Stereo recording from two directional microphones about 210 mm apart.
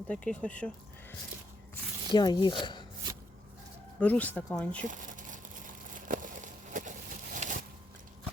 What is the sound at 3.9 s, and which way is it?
Speech, 5° left (ahead or behind).